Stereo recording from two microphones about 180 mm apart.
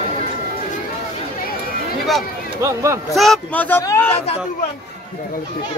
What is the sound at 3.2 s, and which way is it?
Speech, centre (ahead or behind).